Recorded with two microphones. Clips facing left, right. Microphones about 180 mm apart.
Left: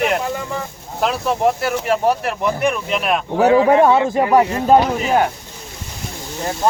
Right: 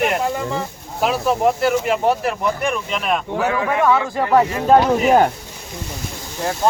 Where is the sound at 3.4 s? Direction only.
30° left (ahead or behind).